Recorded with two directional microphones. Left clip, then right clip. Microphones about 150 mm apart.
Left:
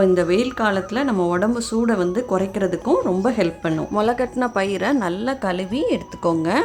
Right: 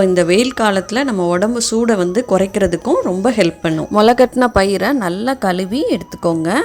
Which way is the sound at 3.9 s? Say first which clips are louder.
Right 11 dB; 40° right (ahead or behind).